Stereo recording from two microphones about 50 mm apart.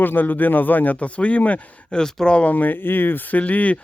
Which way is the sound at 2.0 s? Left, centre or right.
Centre.